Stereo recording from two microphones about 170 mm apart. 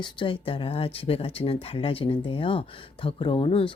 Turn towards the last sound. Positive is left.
turn(degrees=30)  # may be behind; listen again after turning